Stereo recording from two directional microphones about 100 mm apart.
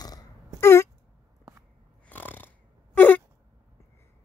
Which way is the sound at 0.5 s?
25° left (ahead or behind).